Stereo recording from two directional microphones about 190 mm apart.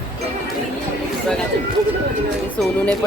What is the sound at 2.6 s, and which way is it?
Speech, 5° left (ahead or behind).